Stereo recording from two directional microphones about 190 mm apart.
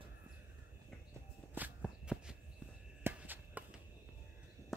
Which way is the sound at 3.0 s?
10° right (ahead or behind).